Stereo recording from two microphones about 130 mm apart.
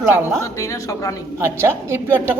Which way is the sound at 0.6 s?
25° left (ahead or behind).